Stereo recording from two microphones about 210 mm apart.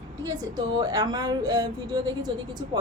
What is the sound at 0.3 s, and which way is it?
A woman's voice, 15° right (ahead or behind).